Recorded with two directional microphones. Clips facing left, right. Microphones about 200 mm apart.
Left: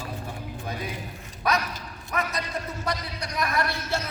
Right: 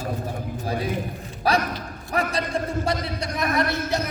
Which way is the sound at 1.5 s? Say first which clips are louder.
Right 4 dB; 30° right (ahead or behind).